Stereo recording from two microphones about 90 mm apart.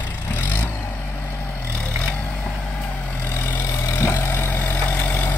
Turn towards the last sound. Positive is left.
turn(degrees=20)  # may be behind; listen again after turning